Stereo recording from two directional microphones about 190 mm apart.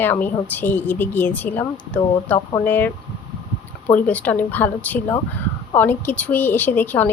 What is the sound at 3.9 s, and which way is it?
A woman's voice, 5° left (ahead or behind).